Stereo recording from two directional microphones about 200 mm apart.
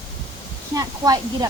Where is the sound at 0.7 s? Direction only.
20° right (ahead or behind).